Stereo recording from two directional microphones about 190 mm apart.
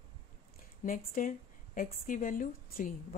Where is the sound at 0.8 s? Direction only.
45° left (ahead or behind).